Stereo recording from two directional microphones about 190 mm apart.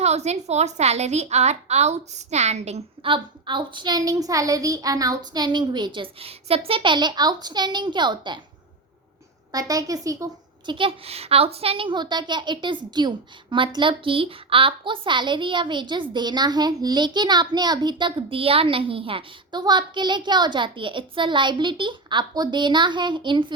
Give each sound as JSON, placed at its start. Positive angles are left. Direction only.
{"t": 0.0, "sound": "a woman's voice", "side_deg": -35}
{"t": 9.5, "sound": "a woman's voice", "side_deg": -20}
{"t": 10.7, "sound": "a woman's voice", "side_deg": -25}